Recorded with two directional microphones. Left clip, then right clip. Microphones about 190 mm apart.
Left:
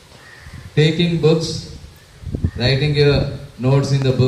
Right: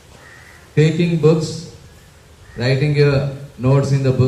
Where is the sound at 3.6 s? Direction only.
30° left (ahead or behind).